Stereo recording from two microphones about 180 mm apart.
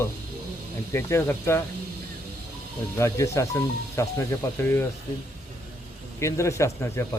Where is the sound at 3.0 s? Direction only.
15° left (ahead or behind).